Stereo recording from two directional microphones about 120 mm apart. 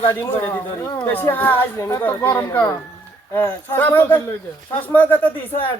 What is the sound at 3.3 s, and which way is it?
A man's voice, 20° left (ahead or behind).